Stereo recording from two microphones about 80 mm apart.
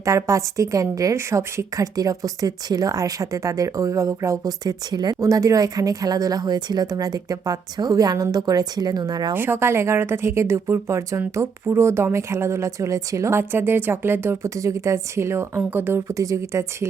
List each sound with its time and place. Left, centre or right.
0.0 s a woman's voice: right
4.6 s speech: right
5.2 s a woman's voice: right
9.3 s a woman's voice: right
13.5 s a woman's voice: right
16.0 s a woman's voice: right